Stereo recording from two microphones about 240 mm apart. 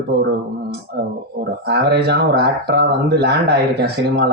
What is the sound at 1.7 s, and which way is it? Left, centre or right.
Speech, right.